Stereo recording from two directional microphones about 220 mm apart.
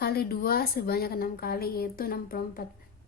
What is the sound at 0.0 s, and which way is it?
A woman's voice, 45° left (ahead or behind).